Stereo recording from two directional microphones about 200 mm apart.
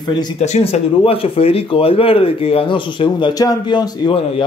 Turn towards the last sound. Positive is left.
turn(degrees=25)  # may be behind; listen again after turning